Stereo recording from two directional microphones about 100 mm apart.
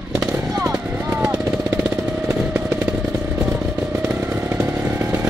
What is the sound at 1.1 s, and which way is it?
Vehicle, 30° right (ahead or behind).